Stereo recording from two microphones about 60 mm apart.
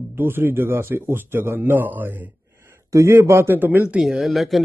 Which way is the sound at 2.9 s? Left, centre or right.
Right.